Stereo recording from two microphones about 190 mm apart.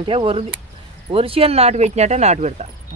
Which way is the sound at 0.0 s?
30° right (ahead or behind).